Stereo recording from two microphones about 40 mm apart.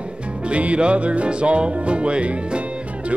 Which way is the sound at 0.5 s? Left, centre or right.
Right.